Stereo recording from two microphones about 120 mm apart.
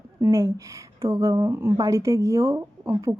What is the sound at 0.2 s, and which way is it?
A woman's voice, 25° right (ahead or behind).